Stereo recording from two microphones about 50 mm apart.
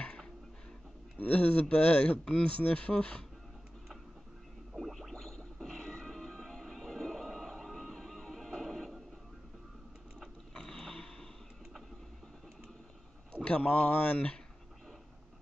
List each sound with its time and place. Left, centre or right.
1.1 s speech: left
4.7 s music: centre
10.5 s creak: centre
13.4 s speech: left